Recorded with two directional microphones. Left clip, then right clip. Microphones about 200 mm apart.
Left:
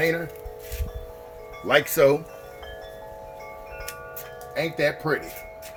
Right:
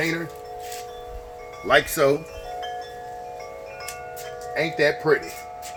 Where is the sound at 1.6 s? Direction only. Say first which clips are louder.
Even; 35° left (ahead or behind).